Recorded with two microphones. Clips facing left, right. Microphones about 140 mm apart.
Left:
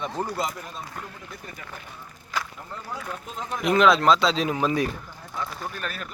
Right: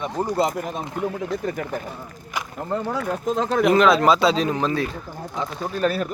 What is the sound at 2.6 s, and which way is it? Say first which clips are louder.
Speech: right 11 dB; 70° right (ahead or behind).